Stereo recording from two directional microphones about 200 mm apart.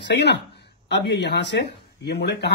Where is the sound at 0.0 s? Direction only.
60° left (ahead or behind).